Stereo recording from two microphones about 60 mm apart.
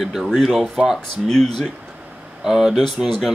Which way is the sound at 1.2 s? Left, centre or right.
Centre.